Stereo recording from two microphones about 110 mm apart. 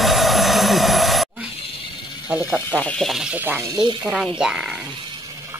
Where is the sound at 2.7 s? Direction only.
10° left (ahead or behind).